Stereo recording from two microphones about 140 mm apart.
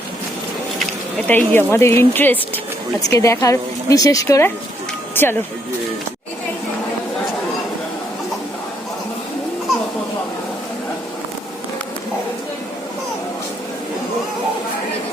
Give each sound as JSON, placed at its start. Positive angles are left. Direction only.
{"t": 1.3, "sound": "a woman's voice", "side_deg": 15}